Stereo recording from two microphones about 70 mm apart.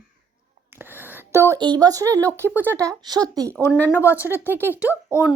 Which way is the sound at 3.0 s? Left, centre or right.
Right.